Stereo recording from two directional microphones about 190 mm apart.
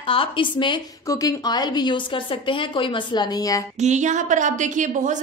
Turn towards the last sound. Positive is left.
turn(degrees=-40)  # may be behind; listen again after turning